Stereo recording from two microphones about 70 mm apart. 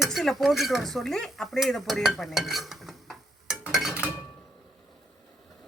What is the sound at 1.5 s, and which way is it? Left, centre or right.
Dishes, centre.